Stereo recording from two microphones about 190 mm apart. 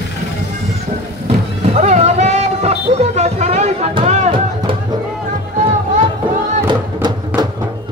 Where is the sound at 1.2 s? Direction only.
35° right (ahead or behind).